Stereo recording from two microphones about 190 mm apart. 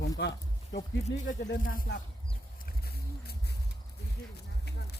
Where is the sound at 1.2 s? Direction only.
45° left (ahead or behind).